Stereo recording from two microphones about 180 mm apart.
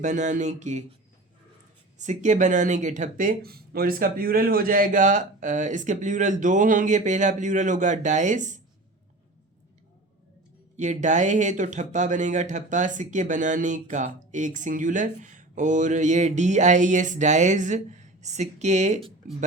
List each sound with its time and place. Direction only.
0.0 s speech: 40° right (ahead or behind)
2.0 s speech: 40° right (ahead or behind)
10.8 s speech: 45° right (ahead or behind)